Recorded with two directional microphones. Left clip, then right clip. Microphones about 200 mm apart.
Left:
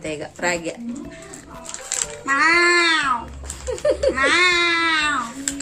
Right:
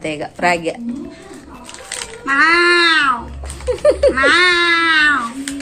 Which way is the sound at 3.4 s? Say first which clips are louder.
Right 11 dB; 30° right (ahead or behind).